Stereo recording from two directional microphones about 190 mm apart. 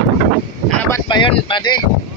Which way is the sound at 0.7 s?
10° left (ahead or behind).